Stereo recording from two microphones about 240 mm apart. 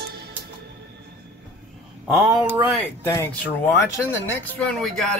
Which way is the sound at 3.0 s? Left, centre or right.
Centre.